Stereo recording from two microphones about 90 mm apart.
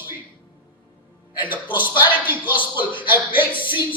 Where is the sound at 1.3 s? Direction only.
20° right (ahead or behind).